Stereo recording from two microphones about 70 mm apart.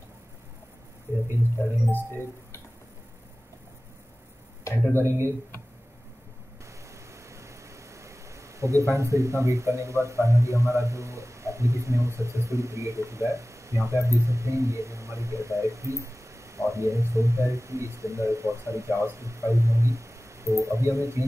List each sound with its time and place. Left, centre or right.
2.0 s speech: left
4.6 s speech: left
6.6 s vehicle: right